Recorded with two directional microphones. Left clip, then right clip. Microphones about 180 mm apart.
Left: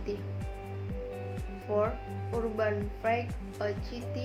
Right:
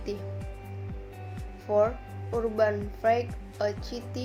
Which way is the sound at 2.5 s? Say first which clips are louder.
Right 8 dB; 55° right (ahead or behind).